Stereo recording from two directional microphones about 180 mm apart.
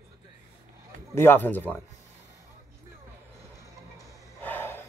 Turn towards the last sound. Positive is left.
turn(degrees=10)  # may be behind; listen again after turning